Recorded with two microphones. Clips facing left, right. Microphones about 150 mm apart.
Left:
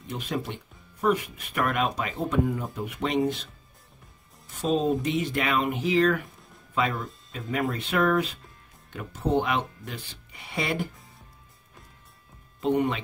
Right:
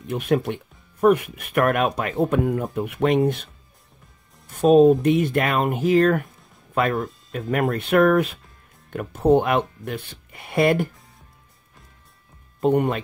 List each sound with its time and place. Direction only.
0.1 s speech: 60° right (ahead or behind)
4.5 s speech: 55° right (ahead or behind)
12.5 s speech: 50° right (ahead or behind)